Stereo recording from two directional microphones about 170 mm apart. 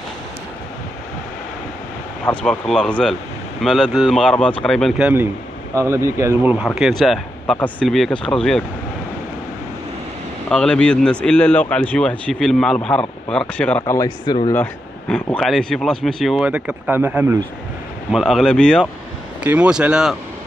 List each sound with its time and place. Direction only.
2.2 s a man's voice: 5° left (ahead or behind)
10.5 s a man's voice: 5° left (ahead or behind)
13.9 s speech: 25° left (ahead or behind)
14.5 s a man's voice: 10° left (ahead or behind); by 17.4 s 10° right (ahead or behind)
18.1 s a man's voice: centre (ahead or behind)
19.4 s a man's voice: 10° right (ahead or behind)